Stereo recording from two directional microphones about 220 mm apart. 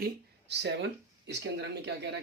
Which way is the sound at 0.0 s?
50° right (ahead or behind).